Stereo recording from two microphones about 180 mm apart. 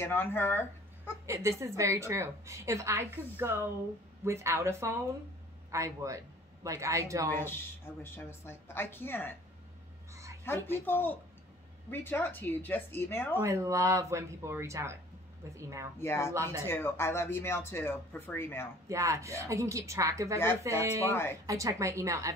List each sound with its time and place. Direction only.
0.0 s speech: 10° left (ahead or behind)
1.2 s a woman's voice: 15° right (ahead or behind)
7.2 s speech: 10° left (ahead or behind)
10.1 s a sound: 15° right (ahead or behind)
10.4 s speech: 10° left (ahead or behind)
13.4 s a woman's voice: 15° right (ahead or behind)
16.0 s speech: 15° left (ahead or behind)
18.9 s a woman's voice: 15° right (ahead or behind)
21.1 s speech: 15° left (ahead or behind)
21.5 s a woman's voice: 20° right (ahead or behind)